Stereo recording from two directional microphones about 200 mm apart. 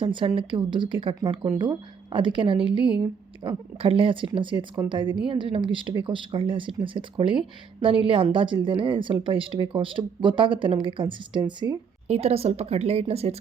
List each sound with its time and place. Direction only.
0.0 s speech: 25° right (ahead or behind)
12.0 s a woman's voice: 30° right (ahead or behind)